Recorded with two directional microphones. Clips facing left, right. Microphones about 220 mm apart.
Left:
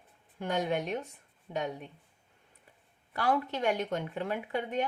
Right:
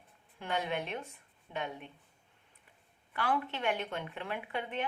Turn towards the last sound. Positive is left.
turn(degrees=40)  # may be behind; listen again after turning